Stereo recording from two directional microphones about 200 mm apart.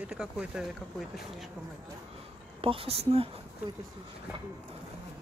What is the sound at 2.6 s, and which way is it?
Speech, 30° right (ahead or behind).